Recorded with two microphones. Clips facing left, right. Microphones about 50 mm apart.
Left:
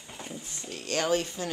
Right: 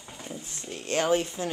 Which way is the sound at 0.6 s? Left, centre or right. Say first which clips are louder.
Right 2 dB; right.